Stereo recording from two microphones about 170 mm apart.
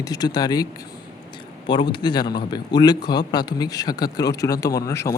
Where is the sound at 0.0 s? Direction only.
25° left (ahead or behind).